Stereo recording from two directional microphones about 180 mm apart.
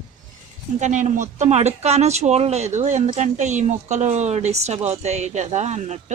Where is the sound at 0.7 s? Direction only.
40° right (ahead or behind).